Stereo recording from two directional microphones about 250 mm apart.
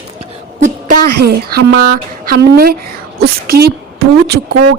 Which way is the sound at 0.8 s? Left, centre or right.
Right.